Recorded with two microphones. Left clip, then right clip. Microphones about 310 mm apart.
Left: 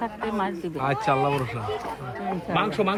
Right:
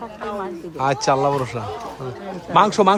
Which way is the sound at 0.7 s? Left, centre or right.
Centre.